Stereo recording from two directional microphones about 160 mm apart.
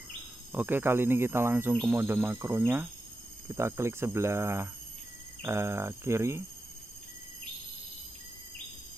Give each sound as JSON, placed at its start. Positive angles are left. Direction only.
{"t": 0.5, "sound": "speech", "side_deg": -10}